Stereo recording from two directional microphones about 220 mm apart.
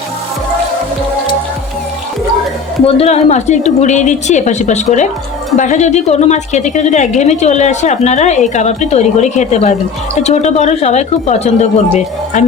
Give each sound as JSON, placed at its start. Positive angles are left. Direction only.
{"t": 2.8, "sound": "a woman's voice", "side_deg": 30}